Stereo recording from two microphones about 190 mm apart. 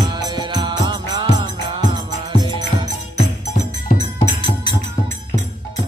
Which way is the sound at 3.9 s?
30° right (ahead or behind).